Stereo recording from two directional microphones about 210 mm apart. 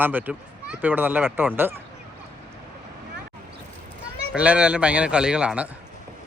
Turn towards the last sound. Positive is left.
turn(degrees=-5)  # may be behind; listen again after turning